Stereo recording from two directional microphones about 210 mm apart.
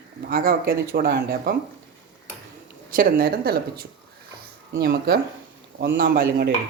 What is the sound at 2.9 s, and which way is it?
Speech, 40° right (ahead or behind).